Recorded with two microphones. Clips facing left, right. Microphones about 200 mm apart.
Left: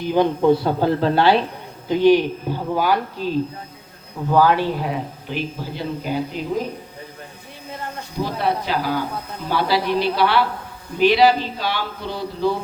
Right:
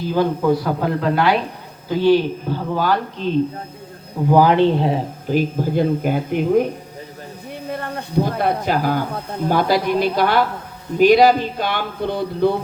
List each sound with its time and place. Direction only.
0.0 s a man's voice: 20° left (ahead or behind)
1.9 s speech: 15° left (ahead or behind)
4.3 s speech: 20° right (ahead or behind)
5.3 s speech: 45° right (ahead or behind)
7.7 s speech: 60° right (ahead or behind)